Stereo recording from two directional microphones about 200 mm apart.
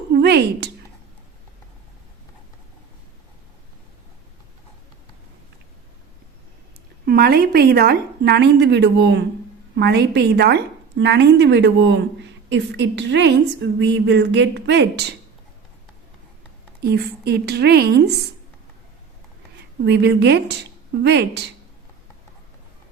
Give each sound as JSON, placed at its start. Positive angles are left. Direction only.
{"t": 0.1, "sound": "speech", "side_deg": -55}
{"t": 7.0, "sound": "a woman's voice", "side_deg": -50}
{"t": 16.8, "sound": "a woman's voice", "side_deg": -55}
{"t": 19.8, "sound": "a woman's voice", "side_deg": -60}